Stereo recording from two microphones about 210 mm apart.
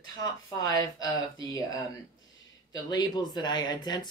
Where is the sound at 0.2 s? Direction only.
15° left (ahead or behind).